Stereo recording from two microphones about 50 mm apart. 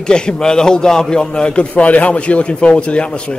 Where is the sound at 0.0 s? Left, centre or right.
Centre.